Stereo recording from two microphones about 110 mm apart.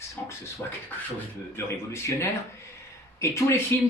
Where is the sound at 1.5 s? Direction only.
25° left (ahead or behind).